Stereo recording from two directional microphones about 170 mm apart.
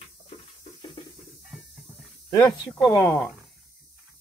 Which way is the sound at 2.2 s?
20° left (ahead or behind).